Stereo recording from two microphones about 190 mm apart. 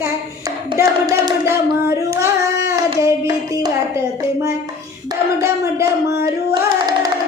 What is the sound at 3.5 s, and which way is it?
Hands, 15° right (ahead or behind).